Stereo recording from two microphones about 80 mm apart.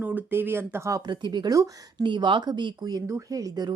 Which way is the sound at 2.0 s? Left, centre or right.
Right.